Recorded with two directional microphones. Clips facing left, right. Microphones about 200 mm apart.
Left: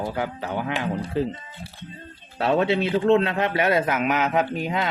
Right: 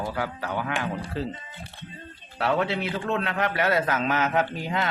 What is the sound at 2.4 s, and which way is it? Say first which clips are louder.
A man's voice: left 4 dB; 25° left (ahead or behind).